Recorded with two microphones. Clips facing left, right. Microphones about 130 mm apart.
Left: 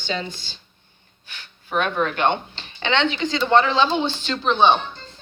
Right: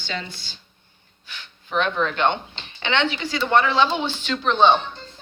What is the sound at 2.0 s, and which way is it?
Speech, 10° left (ahead or behind).